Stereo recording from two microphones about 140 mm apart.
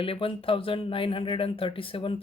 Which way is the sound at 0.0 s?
40° left (ahead or behind).